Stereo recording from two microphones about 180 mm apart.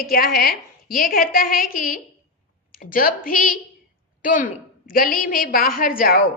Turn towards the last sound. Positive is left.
turn(degrees=55)  # may be behind; listen again after turning